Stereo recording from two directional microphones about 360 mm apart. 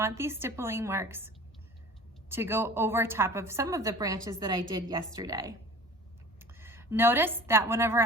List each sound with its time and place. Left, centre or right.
0.0 s a woman's voice: centre
2.3 s a woman's voice: centre